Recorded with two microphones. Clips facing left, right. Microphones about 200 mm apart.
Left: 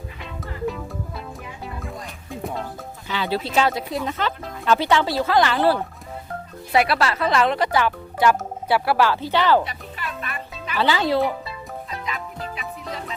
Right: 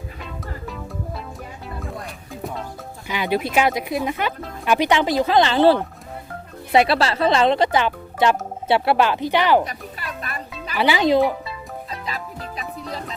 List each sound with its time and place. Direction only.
3.1 s speech: 15° right (ahead or behind)
9.6 s music: 40° right (ahead or behind)
10.8 s speech: 15° right (ahead or behind)
11.2 s speech: centre (ahead or behind)
11.9 s music: 35° right (ahead or behind)